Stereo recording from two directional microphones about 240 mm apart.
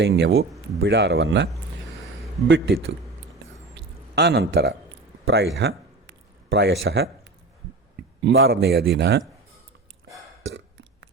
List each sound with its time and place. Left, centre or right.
0.0 s speech: right
2.5 s a man's voice: right
10.4 s burping: right